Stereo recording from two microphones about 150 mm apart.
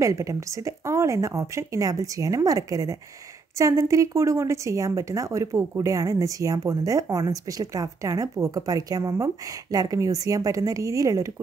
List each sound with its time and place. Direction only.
0.0 s speech: 20° right (ahead or behind)